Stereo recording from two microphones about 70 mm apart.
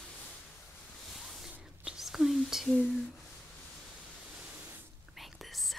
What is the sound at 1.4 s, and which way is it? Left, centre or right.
Whispering, centre.